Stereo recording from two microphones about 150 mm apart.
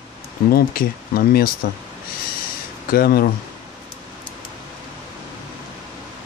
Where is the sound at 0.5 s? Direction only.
80° left.